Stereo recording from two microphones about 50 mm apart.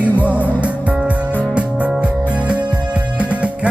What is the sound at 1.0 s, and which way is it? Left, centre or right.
Music, right.